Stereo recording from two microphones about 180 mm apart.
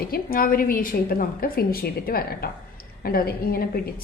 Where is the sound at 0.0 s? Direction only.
55° left (ahead or behind).